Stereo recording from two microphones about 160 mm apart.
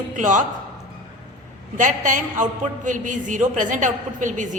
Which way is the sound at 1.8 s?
55° right (ahead or behind).